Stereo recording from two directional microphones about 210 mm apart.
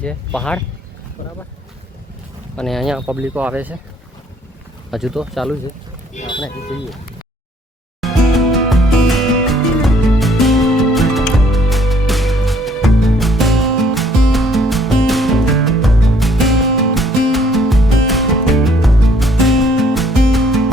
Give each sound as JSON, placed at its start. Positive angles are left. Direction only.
{"t": 0.0, "sound": "speech", "side_deg": 5}
{"t": 2.6, "sound": "speech", "side_deg": 0}
{"t": 4.9, "sound": "speech", "side_deg": 0}
{"t": 8.0, "sound": "music", "side_deg": 0}